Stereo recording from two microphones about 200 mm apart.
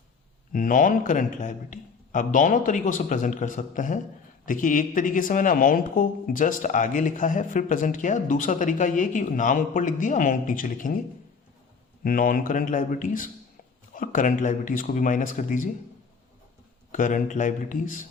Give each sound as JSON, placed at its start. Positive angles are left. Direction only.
{"t": 0.5, "sound": "speech", "side_deg": 40}
{"t": 12.0, "sound": "a man's voice", "side_deg": 45}
{"t": 16.9, "sound": "speech", "side_deg": 40}